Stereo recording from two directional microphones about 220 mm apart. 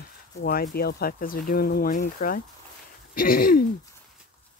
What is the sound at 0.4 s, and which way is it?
Speech, 45° left (ahead or behind).